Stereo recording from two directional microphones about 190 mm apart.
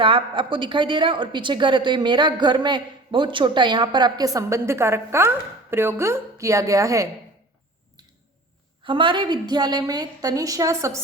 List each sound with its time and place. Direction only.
0.0 s a woman's voice: 25° right (ahead or behind)
8.8 s a woman's voice: 25° right (ahead or behind)